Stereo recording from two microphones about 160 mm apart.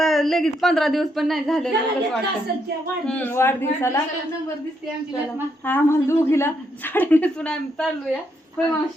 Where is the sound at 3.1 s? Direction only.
10° left (ahead or behind).